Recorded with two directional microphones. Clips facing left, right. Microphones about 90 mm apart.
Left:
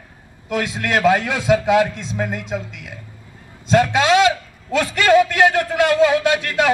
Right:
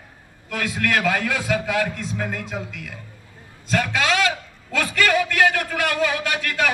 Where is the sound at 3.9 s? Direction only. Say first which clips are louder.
Left 7 dB; 20° left (ahead or behind).